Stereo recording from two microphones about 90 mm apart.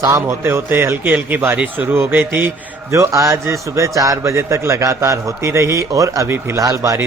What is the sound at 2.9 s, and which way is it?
A man's voice, 35° right (ahead or behind).